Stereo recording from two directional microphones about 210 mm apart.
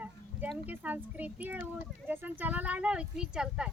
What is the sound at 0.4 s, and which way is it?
Speech, 5° right (ahead or behind).